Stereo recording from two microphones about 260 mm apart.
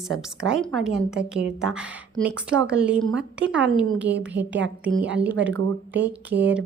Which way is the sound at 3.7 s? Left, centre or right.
Right.